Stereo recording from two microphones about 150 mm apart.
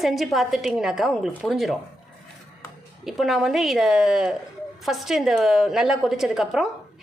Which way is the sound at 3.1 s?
Centre (ahead or behind).